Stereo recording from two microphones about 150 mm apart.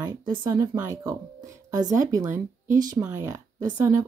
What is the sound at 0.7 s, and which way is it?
Speech, 15° right (ahead or behind).